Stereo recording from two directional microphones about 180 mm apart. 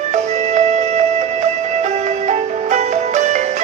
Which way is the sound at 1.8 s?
40° right (ahead or behind).